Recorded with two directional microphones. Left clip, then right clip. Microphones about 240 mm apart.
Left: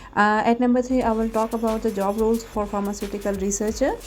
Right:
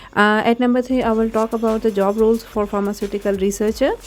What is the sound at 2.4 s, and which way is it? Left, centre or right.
Speech, right.